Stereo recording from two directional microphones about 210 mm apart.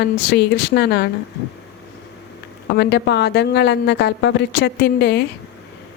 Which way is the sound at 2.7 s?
55° left (ahead or behind).